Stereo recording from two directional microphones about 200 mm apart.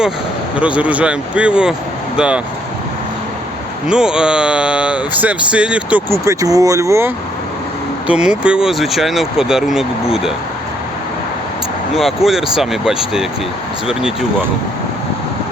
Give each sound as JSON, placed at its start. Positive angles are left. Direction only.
{"t": 0.5, "sound": "speech", "side_deg": -5}
{"t": 3.8, "sound": "speech", "side_deg": -5}
{"t": 11.9, "sound": "speech", "side_deg": 0}